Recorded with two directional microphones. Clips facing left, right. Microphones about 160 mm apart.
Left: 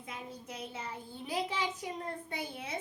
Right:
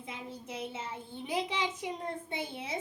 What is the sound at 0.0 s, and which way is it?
A child's voice, 25° right (ahead or behind).